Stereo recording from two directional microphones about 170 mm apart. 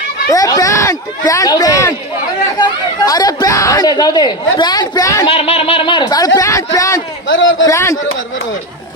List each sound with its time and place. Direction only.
0.3 s speech: 20° left (ahead or behind)
5.3 s speech: 35° left (ahead or behind); by 7.0 s 20° left (ahead or behind)
7.3 s a man's voice: 90° left
7.7 s a man's voice: 15° left (ahead or behind)